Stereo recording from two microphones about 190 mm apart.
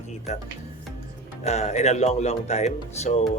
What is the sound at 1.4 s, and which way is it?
Speech, 35° left (ahead or behind).